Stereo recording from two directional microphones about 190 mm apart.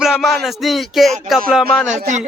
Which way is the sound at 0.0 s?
Centre (ahead or behind).